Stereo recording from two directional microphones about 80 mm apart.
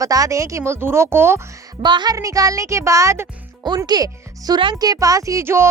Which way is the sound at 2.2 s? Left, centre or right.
Right.